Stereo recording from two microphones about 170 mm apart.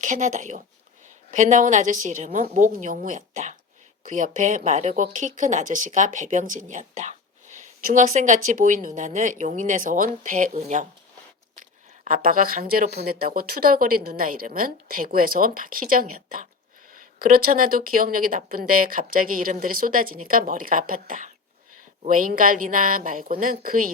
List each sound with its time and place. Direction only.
0.0 s speech: 50° right (ahead or behind)
12.0 s speech: 55° right (ahead or behind)